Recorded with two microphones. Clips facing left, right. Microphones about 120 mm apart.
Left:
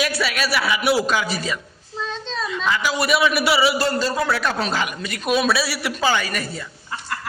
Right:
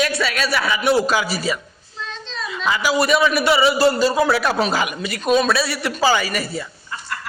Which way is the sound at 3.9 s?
10° right (ahead or behind).